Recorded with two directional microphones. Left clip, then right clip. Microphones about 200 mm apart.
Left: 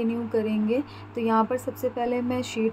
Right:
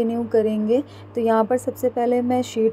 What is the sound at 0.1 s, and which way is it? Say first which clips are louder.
A woman's voice: right 7 dB; 10° right (ahead or behind).